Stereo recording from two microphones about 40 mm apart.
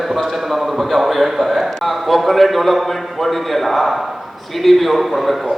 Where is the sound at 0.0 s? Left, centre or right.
Centre.